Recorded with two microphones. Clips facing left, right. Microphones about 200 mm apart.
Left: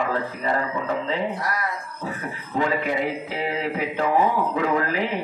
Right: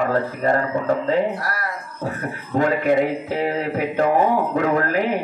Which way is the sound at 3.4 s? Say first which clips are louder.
Right 1 dB; 45° right (ahead or behind).